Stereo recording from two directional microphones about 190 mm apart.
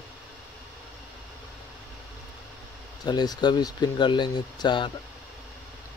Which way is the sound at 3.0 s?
20° left (ahead or behind).